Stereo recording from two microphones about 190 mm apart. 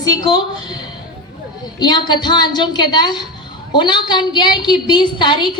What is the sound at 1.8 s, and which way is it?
Speech, 25° left (ahead or behind).